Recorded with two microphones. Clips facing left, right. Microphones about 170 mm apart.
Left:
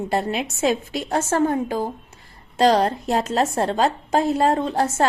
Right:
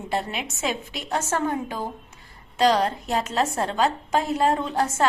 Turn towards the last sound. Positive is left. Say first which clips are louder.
# left 3 dB
turn(degrees=30)  # may be behind; listen again after turning